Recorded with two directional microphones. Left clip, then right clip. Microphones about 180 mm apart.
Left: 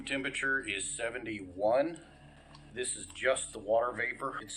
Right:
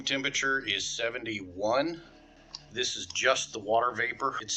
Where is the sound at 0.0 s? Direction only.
40° right (ahead or behind).